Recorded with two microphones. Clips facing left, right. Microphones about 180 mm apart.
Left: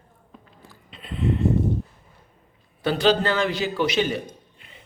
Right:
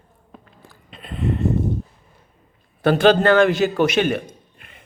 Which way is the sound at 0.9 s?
50° right (ahead or behind).